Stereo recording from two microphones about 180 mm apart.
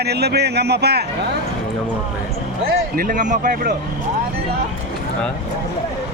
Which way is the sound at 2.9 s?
50° right (ahead or behind).